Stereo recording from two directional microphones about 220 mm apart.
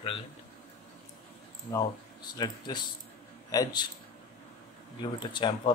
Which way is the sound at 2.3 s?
20° left (ahead or behind).